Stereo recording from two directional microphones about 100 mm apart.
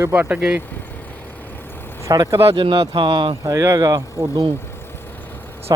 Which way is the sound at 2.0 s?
35° right (ahead or behind).